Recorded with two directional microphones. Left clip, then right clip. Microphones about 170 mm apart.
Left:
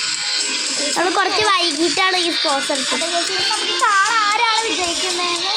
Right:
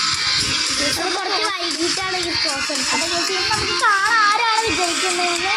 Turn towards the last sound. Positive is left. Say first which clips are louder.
# even
turn(degrees=0)  # may be behind; listen again after turning